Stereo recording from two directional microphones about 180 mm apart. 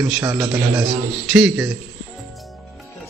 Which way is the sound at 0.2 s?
15° right (ahead or behind).